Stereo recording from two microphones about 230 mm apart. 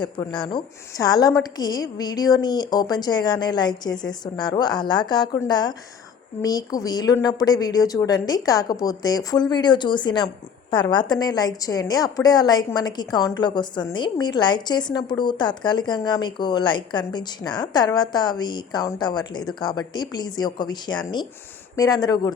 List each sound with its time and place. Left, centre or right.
0.0 s a woman's voice: centre